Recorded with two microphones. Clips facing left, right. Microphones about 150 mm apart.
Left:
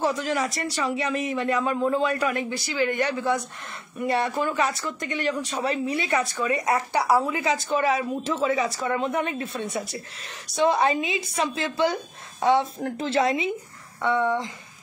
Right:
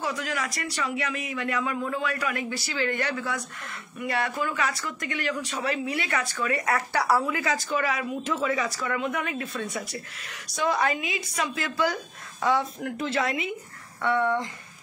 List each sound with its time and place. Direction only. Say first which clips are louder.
0.0 s speech: left 6 dB; 30° left (ahead or behind)
14.0 s speech: left 1 dB; 15° left (ahead or behind)